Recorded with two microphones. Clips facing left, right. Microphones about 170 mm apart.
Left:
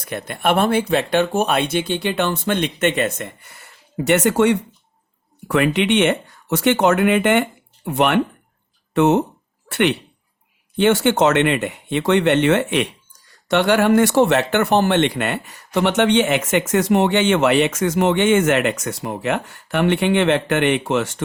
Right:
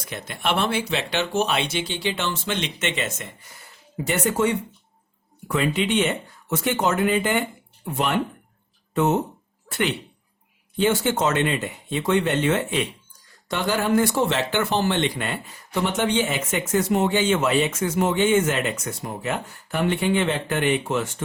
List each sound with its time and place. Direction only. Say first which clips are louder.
0.0 s speech: left 6 dB; 60° left (ahead or behind); by 21.2 s 75° left (ahead or behind)